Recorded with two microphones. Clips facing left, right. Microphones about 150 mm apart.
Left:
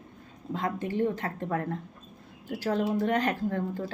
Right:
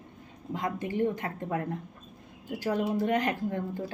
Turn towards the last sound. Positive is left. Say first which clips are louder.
# left 2 dB
turn(degrees=-20)  # may be behind; listen again after turning